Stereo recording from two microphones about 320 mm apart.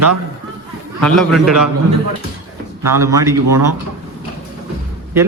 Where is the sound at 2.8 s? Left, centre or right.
Centre.